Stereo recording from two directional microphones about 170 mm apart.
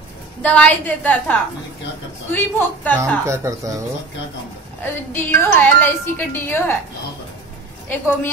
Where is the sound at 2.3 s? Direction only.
10° left (ahead or behind).